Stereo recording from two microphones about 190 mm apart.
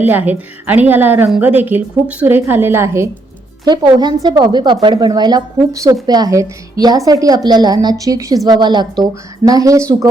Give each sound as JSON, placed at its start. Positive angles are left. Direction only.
{"t": 0.0, "sound": "a woman's voice", "side_deg": -10}